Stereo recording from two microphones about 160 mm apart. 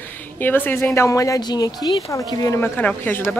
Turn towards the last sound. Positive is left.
turn(degrees=10)  # may be behind; listen again after turning